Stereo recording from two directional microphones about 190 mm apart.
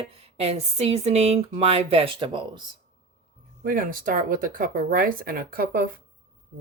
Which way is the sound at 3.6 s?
45° right (ahead or behind).